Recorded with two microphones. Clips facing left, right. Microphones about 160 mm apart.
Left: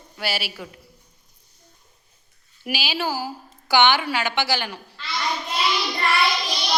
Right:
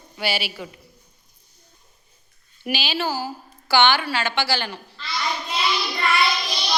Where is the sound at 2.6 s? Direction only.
5° left (ahead or behind).